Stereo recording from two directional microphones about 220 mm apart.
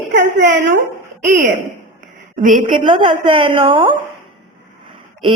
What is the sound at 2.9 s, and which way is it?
A woman's voice, 20° right (ahead or behind).